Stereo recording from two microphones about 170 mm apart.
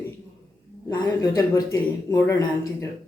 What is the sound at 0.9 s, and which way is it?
Speech, 20° left (ahead or behind).